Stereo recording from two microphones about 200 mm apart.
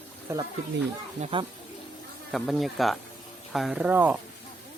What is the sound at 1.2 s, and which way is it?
Speech, 25° right (ahead or behind).